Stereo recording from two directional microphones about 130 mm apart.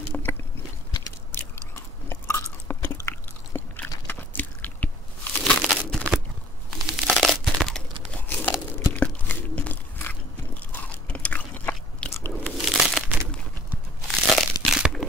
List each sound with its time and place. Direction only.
0.1 s a sound: 15° left (ahead or behind)
1.3 s chewing: 15° left (ahead or behind)
4.1 s crunch: 15° left (ahead or behind)
6.7 s crumpling: centre (ahead or behind)
10.7 s biting: 10° left (ahead or behind)
12.4 s crumpling: centre (ahead or behind)
14.0 s crumpling: centre (ahead or behind)